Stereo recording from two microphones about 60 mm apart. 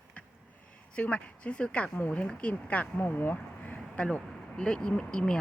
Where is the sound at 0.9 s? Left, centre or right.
Left.